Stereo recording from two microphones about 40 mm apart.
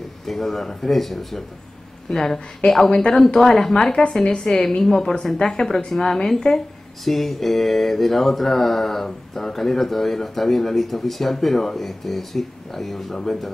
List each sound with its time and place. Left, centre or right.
0.3 s mantra: centre
2.0 s speech: centre
7.1 s mantra: centre